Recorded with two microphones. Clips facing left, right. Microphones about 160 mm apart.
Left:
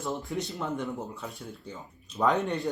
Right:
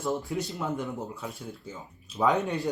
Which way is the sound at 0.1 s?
Centre (ahead or behind).